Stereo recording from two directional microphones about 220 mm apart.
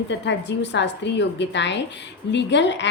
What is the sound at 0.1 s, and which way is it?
A woman's voice, 55° left (ahead or behind).